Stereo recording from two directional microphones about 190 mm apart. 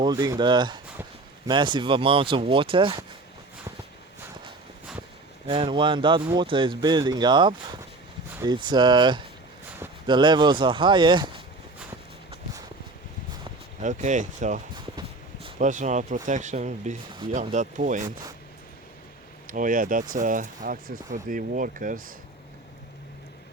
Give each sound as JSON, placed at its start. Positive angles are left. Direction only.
{"t": 0.0, "sound": "speech", "side_deg": -20}
{"t": 5.5, "sound": "speech", "side_deg": -30}
{"t": 13.8, "sound": "speech", "side_deg": -40}
{"t": 19.5, "sound": "speech", "side_deg": -45}